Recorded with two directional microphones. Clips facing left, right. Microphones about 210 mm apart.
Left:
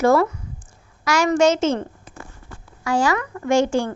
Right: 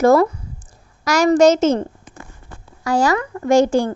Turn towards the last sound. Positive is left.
turn(degrees=-40)  # may be behind; listen again after turning